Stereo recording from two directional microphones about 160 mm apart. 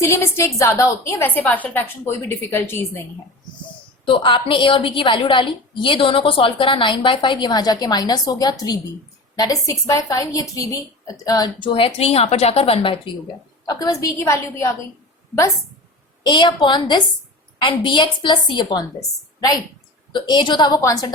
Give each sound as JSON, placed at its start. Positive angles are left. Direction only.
{"t": 0.0, "sound": "a woman's voice", "side_deg": 15}
{"t": 4.0, "sound": "a woman's voice", "side_deg": 35}
{"t": 13.7, "sound": "a woman's voice", "side_deg": 25}
{"t": 16.2, "sound": "a woman's voice", "side_deg": 30}
{"t": 20.1, "sound": "a woman's voice", "side_deg": 30}